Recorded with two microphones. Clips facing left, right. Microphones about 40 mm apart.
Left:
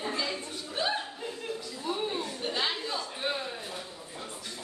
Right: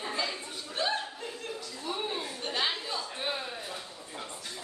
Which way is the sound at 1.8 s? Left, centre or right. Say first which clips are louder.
Left 2 dB; centre.